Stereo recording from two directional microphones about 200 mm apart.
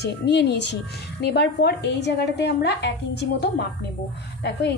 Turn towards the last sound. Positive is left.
turn(degrees=55)  # may be behind; listen again after turning